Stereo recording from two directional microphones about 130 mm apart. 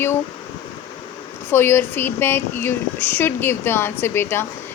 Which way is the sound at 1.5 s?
15° left (ahead or behind).